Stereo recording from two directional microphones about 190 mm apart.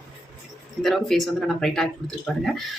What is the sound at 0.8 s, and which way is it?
Speech, centre (ahead or behind).